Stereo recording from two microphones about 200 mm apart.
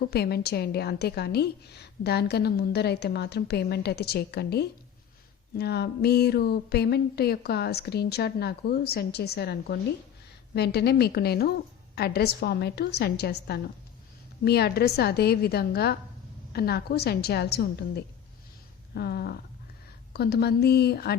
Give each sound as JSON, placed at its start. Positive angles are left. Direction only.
{"t": 0.0, "sound": "a woman's voice", "side_deg": 55}